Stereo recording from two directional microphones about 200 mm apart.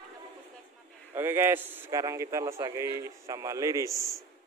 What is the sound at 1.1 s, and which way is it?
A man's voice, 10° right (ahead or behind).